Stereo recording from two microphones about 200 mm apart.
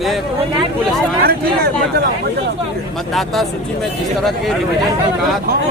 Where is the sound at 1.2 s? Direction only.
50° right (ahead or behind).